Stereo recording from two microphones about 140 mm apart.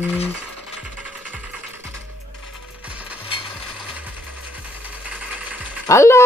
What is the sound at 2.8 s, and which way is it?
Mechanisms, 10° right (ahead or behind).